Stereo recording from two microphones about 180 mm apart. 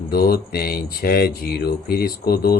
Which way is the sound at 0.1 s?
55° left (ahead or behind).